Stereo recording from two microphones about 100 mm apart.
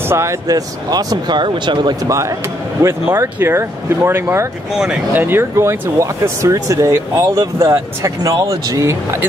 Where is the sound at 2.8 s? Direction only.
25° right (ahead or behind).